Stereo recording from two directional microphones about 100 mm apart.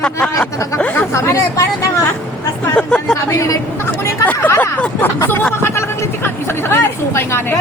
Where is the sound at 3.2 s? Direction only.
35° left (ahead or behind).